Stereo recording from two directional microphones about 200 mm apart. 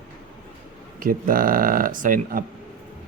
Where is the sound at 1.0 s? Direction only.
45° right (ahead or behind).